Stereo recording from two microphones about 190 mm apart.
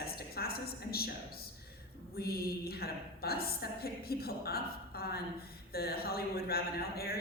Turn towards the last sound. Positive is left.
turn(degrees=55)  # may be behind; listen again after turning